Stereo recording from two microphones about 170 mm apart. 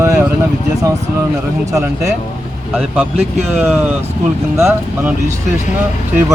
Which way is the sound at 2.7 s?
5° right (ahead or behind).